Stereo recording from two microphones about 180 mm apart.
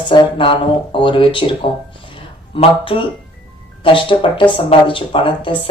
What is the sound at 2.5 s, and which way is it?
Speech, 30° left (ahead or behind).